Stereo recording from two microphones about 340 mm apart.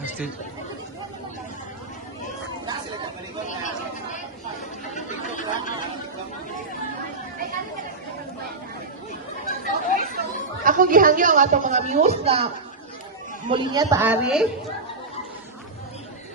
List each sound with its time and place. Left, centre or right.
4.9 s chatter: left
9.7 s speech: right
13.5 s a woman's voice: centre